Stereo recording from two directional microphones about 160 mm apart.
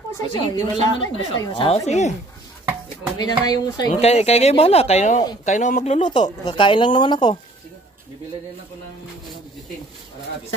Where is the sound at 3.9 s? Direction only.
40° left (ahead or behind).